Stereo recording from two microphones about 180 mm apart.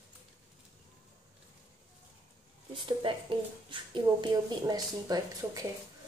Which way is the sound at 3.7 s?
25° right (ahead or behind).